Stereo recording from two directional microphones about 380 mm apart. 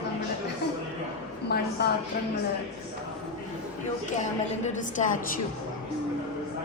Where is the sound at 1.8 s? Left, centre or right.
Left.